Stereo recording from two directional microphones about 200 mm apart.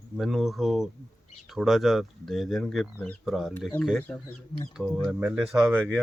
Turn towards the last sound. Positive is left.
turn(degrees=-5)  # may be behind; listen again after turning